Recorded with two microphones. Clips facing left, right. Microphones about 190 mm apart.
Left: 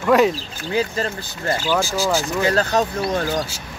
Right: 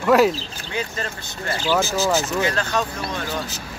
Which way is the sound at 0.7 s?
35° left (ahead or behind).